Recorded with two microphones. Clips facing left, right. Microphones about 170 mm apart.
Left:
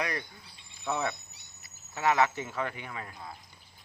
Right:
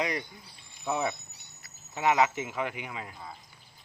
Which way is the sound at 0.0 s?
20° right (ahead or behind).